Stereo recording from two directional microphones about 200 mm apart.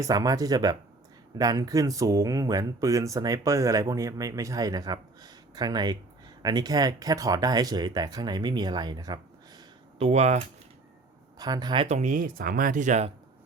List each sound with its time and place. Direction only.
0.0 s speech: 20° right (ahead or behind)
10.1 s speech: 35° right (ahead or behind)
11.3 s speech: 20° right (ahead or behind); by 13.1 s 35° right (ahead or behind)